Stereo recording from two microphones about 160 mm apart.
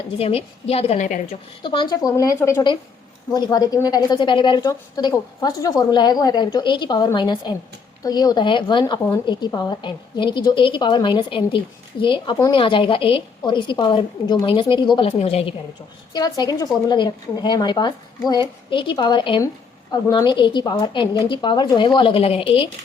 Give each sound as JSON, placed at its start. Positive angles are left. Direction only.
{"t": 0.2, "sound": "a woman's voice", "side_deg": 40}
{"t": 1.3, "sound": "a woman's voice", "side_deg": 30}
{"t": 16.1, "sound": "a woman's voice", "side_deg": 25}